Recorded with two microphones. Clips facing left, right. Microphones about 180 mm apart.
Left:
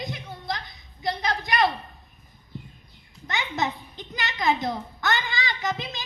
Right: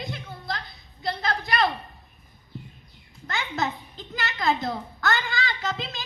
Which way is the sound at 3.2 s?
20° left (ahead or behind).